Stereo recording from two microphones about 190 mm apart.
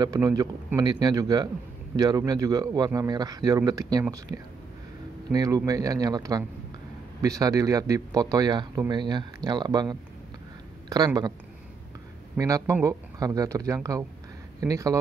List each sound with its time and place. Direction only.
0.0 s speech: 20° right (ahead or behind)
12.4 s speech: 15° right (ahead or behind)